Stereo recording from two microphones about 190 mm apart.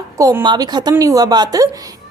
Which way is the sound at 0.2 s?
20° right (ahead or behind).